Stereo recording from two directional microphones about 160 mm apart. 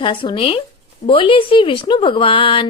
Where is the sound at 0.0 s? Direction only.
30° left (ahead or behind).